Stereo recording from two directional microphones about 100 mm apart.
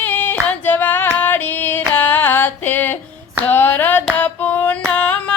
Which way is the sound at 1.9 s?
20° left (ahead or behind).